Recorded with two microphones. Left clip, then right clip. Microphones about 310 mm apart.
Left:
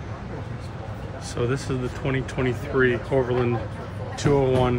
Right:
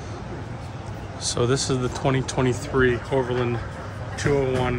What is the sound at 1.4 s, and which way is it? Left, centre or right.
Speech, centre.